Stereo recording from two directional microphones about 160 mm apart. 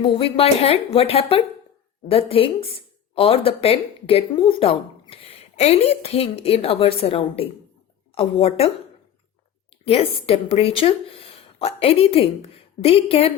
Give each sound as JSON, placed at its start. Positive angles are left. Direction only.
{"t": 0.0, "sound": "a woman's voice", "side_deg": 35}
{"t": 9.8, "sound": "a woman's voice", "side_deg": 35}